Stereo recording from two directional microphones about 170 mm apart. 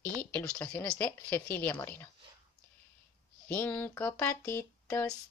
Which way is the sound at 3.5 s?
10° left (ahead or behind).